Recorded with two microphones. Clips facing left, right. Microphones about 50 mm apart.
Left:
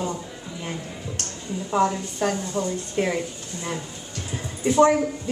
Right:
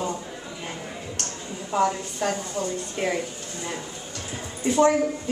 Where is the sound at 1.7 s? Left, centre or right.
Centre.